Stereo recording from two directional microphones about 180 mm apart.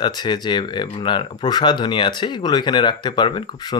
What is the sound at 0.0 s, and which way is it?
Speech, 25° left (ahead or behind).